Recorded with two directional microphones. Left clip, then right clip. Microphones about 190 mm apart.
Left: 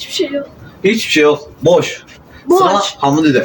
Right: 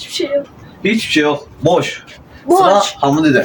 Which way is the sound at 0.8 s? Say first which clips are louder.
Left 3 dB; centre (ahead or behind).